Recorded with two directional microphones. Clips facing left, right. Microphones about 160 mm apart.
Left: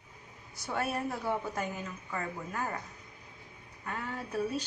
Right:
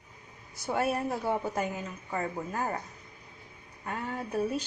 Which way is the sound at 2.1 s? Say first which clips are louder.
Right 5 dB; 30° right (ahead or behind).